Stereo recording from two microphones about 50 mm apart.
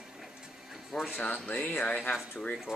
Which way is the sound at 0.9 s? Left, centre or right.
Centre.